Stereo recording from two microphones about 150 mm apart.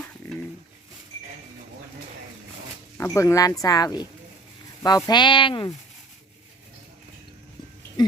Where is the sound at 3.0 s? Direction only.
20° left (ahead or behind).